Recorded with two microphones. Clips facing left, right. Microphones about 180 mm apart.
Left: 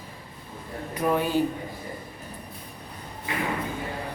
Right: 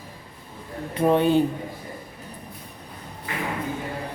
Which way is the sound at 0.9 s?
25° right (ahead or behind).